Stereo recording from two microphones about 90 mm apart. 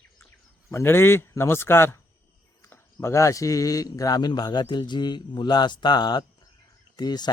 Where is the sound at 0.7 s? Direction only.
30° left (ahead or behind).